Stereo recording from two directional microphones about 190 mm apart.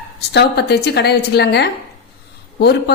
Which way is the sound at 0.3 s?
60° left (ahead or behind).